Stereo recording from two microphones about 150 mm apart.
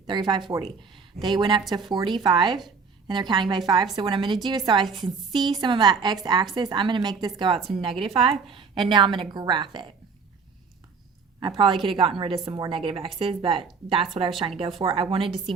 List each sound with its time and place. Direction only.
0.1 s a woman's voice: 30° right (ahead or behind)
11.3 s a woman's voice: 30° right (ahead or behind)